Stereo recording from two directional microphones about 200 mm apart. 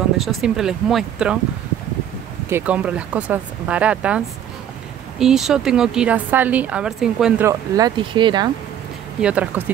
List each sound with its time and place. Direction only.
0.2 s speech: centre (ahead or behind)
2.5 s speech: 5° right (ahead or behind)
5.2 s speech: centre (ahead or behind)
7.4 s speech: 20° right (ahead or behind)
9.2 s speech: 5° right (ahead or behind)